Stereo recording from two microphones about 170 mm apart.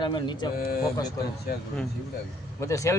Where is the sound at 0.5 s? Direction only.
60° left (ahead or behind).